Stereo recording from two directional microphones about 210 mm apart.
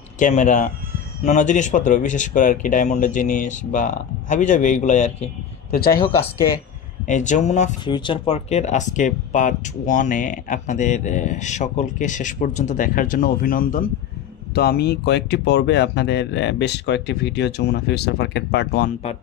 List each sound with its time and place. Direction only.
0.2 s speech: 35° left (ahead or behind)
7.1 s speech: 35° left (ahead or behind)
7.8 s speech: 20° left (ahead or behind); by 18.9 s 50° left (ahead or behind)